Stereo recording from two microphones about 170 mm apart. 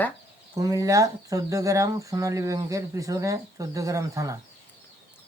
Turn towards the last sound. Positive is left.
turn(degrees=-20)  # may be behind; listen again after turning